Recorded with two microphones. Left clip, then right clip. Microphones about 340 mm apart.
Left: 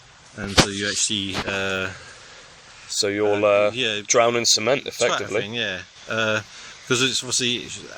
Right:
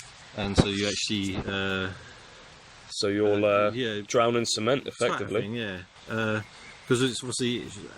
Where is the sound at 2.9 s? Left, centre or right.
Left.